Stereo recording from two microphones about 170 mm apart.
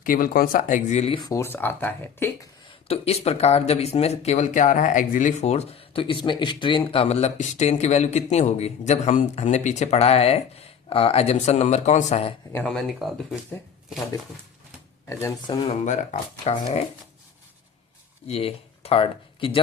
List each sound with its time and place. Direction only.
0.0 s speech: 55° left (ahead or behind); by 1.2 s 40° left (ahead or behind)
1.2 s speech: 15° left (ahead or behind)
2.8 s speech: 35° left (ahead or behind)
12.5 s speech: 5° left (ahead or behind)
15.4 s speech: 30° left (ahead or behind)
18.3 s speech: 35° left (ahead or behind)